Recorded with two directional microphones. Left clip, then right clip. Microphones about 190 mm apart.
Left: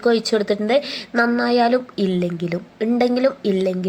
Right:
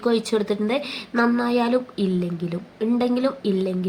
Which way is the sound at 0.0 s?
10° left (ahead or behind).